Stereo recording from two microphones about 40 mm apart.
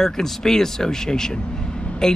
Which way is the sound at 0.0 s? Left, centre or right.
Centre.